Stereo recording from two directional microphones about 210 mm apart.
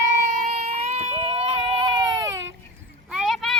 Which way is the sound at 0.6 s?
30° right (ahead or behind).